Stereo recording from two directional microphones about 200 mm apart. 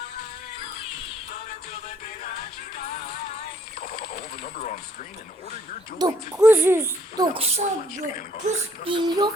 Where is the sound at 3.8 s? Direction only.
45° left (ahead or behind).